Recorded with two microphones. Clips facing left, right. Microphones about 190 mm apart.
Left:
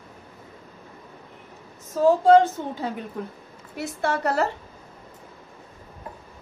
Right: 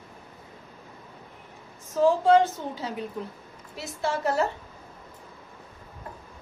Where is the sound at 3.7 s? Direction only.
60° left (ahead or behind).